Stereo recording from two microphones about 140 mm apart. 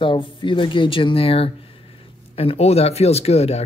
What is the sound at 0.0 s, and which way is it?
Speech, 35° left (ahead or behind).